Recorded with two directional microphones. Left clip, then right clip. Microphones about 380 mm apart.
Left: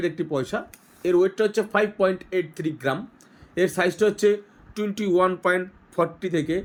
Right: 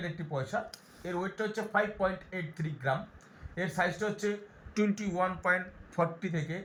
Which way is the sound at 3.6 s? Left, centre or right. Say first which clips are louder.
Left 10 dB; left.